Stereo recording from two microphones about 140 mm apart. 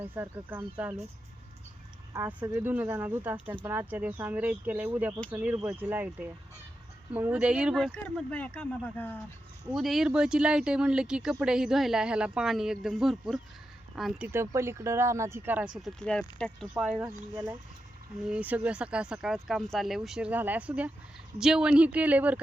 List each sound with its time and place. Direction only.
0.0 s speech: 15° right (ahead or behind)
2.1 s speech: 20° right (ahead or behind); by 8.0 s centre (ahead or behind)
8.0 s speech: 10° left (ahead or behind)
9.7 s speech: centre (ahead or behind)
14.3 s speech: 20° right (ahead or behind); by 16.2 s 5° left (ahead or behind)
16.7 s speech: 5° right (ahead or behind)
17.0 s speech: 15° right (ahead or behind)